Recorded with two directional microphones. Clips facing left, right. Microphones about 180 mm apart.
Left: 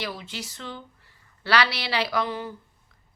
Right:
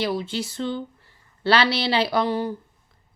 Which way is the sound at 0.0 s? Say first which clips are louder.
Right 9 dB; 30° right (ahead or behind).